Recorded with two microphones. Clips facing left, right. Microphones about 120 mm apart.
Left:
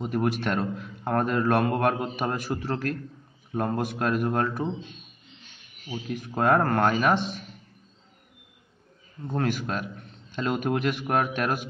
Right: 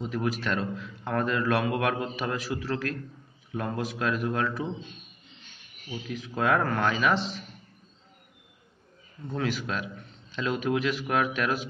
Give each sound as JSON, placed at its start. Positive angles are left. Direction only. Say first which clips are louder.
{"t": 0.0, "sound": "a man's voice", "louder": "left 3 dB", "side_deg": 55}
{"t": 6.0, "sound": "speech", "louder": "left 3 dB", "side_deg": 50}
{"t": 9.3, "sound": "speech", "louder": "left 3 dB", "side_deg": 50}